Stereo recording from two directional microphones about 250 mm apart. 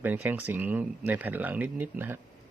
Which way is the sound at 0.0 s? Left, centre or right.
Centre.